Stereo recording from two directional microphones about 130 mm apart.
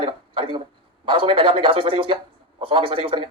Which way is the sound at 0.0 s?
40° right (ahead or behind).